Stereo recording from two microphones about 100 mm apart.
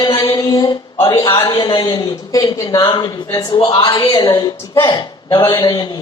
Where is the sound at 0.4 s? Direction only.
40° left (ahead or behind).